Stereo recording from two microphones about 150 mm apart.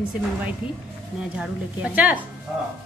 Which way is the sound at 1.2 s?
5° right (ahead or behind).